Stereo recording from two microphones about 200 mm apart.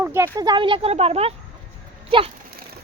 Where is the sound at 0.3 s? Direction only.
20° right (ahead or behind).